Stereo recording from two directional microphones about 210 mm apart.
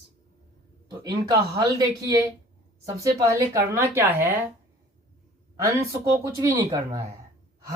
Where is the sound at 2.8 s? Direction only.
15° right (ahead or behind).